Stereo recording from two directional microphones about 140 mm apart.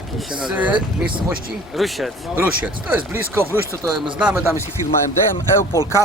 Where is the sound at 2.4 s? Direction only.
15° right (ahead or behind).